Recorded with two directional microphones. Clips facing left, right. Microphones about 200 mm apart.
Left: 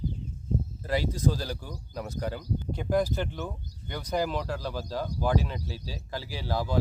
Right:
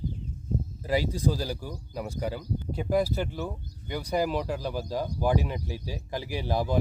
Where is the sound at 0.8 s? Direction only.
10° right (ahead or behind).